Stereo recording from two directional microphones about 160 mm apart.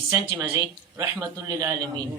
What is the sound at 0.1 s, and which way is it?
Speech, 20° right (ahead or behind).